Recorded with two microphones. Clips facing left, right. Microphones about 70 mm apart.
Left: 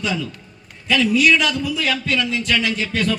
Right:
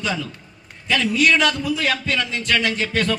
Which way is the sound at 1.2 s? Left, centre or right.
Right.